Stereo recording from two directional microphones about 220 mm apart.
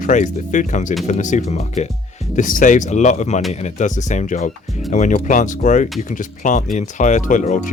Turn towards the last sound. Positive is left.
turn(degrees=35)  # may be behind; listen again after turning